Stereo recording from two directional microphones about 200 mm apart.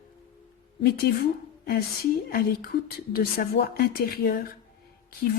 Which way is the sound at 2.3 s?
50° left (ahead or behind).